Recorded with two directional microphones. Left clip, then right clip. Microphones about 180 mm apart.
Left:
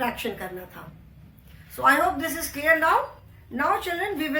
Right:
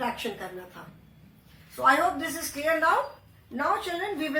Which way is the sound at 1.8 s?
15° left (ahead or behind).